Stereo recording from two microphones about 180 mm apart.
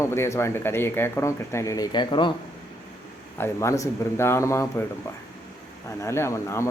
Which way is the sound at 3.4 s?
15° left (ahead or behind).